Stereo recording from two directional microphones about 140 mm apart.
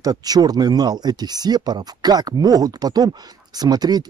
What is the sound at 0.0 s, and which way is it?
Speech, 30° right (ahead or behind).